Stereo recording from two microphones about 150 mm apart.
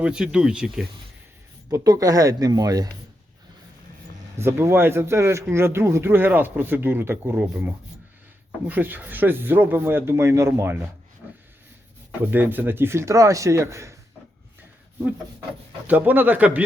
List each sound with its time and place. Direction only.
0.0 s speech: 5° right (ahead or behind)
1.7 s speech: 25° right (ahead or behind)
4.4 s speech: 15° right (ahead or behind)
12.2 s speech: 15° right (ahead or behind)
15.9 s speech: 10° right (ahead or behind)